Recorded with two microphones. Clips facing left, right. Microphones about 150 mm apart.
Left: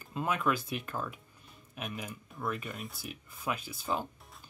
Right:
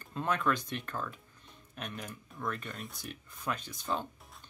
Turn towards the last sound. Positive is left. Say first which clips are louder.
# left 1 dB
turn(degrees=5)  # may be behind; listen again after turning